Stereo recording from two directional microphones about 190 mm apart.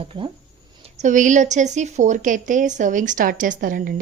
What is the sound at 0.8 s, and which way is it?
A woman's voice, 40° right (ahead or behind).